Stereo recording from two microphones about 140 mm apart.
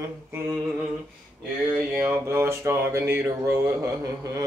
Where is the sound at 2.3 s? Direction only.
20° right (ahead or behind).